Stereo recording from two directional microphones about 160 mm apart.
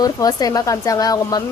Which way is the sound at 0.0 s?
25° left (ahead or behind).